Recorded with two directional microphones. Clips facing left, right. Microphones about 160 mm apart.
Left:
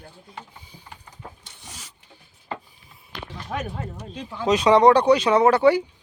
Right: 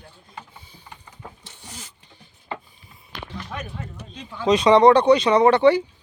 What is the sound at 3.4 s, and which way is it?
Speech, 50° left (ahead or behind).